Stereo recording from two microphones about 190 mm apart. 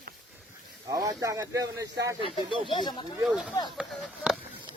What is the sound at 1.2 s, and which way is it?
Speech, 15° right (ahead or behind).